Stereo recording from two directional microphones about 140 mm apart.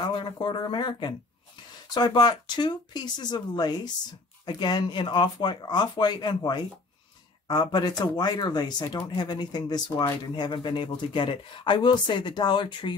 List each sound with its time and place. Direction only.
0.0 s speech: 30° left (ahead or behind)